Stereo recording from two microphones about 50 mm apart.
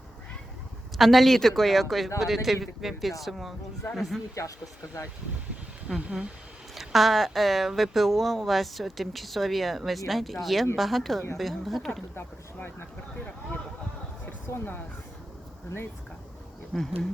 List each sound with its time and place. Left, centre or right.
0.9 s speech: centre
4.4 s speech: left
5.9 s speech: centre
12.5 s speech: left
14.4 s speech: left
16.7 s speech: centre